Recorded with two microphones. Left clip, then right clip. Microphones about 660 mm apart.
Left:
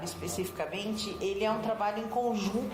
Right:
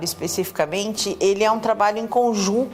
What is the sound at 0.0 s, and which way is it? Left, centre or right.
A woman's voice, right.